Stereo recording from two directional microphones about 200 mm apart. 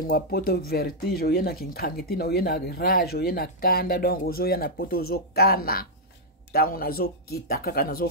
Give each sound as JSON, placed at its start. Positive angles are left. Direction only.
{"t": 0.0, "sound": "speech", "side_deg": 50}